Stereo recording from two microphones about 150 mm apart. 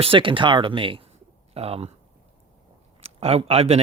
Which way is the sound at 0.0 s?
35° right (ahead or behind).